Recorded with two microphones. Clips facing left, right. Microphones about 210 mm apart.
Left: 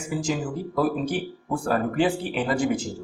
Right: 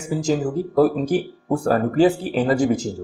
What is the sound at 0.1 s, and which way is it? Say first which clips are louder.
Speech: right 6 dB; 40° right (ahead or behind).